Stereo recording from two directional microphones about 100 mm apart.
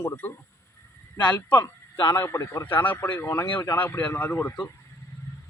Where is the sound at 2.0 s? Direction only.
25° left (ahead or behind).